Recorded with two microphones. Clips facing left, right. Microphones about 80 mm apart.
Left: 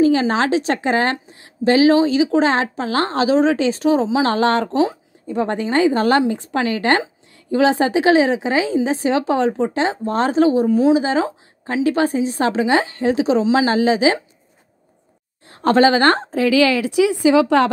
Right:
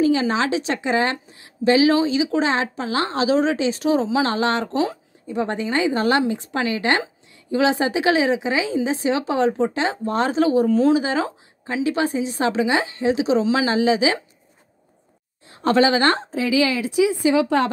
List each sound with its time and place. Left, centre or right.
0.0 s a woman's voice: left
10.6 s a woman's voice: centre
11.0 s a woman's voice: left
11.6 s a woman's voice: left
13.4 s a woman's voice: left
15.4 s a woman's voice: left